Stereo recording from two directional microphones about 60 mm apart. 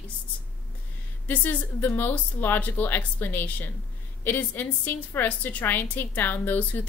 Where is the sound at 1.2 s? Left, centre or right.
Left.